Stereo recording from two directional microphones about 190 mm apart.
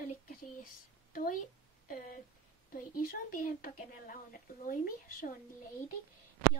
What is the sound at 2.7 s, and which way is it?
Speech, 50° left (ahead or behind).